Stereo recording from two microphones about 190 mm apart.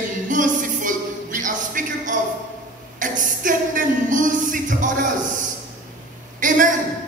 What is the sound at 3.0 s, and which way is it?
Speech, 45° right (ahead or behind).